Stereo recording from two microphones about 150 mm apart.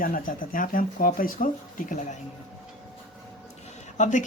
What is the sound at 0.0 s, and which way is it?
Speech, 65° left (ahead or behind).